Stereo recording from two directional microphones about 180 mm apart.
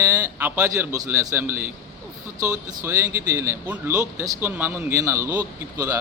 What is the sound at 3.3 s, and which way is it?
A man's voice, 15° right (ahead or behind).